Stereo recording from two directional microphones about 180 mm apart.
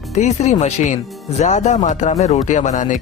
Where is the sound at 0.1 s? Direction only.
40° left (ahead or behind).